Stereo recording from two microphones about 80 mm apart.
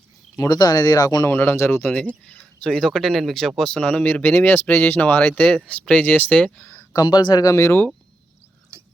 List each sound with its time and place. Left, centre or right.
0.3 s speech: left
1.3 s speech: left
1.9 s speech: centre
6.9 s speech: left
7.4 s speech: left
8.7 s pig: right